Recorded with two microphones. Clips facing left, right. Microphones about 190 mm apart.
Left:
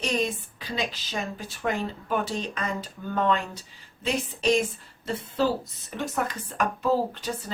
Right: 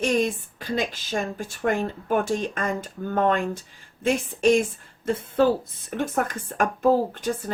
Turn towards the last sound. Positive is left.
turn(degrees=-50)  # may be behind; listen again after turning